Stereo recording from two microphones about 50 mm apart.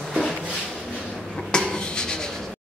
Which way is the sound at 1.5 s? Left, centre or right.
Centre.